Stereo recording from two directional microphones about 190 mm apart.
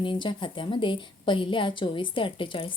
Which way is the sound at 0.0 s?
25° left (ahead or behind).